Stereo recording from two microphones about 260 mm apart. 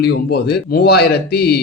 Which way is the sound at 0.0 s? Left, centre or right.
Left.